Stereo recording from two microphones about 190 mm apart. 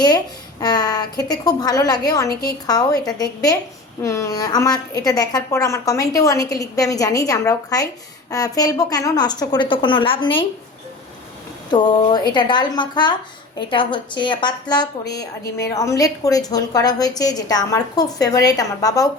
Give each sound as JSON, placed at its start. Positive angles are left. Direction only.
{"t": 0.6, "sound": "a woman's voice", "side_deg": 20}
{"t": 11.7, "sound": "a woman's voice", "side_deg": 25}